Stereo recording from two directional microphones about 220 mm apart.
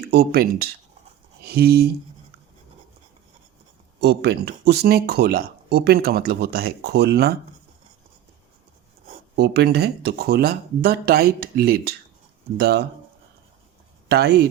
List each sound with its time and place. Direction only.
0.1 s speech: 45° right (ahead or behind)
4.0 s speech: 50° right (ahead or behind)
9.3 s speech: 50° right (ahead or behind)
14.1 s speech: 50° right (ahead or behind)